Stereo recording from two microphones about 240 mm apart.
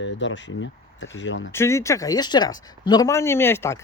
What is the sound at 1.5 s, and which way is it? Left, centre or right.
Speech, centre.